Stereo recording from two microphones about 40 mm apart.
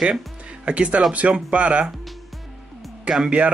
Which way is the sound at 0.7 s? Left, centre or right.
Right.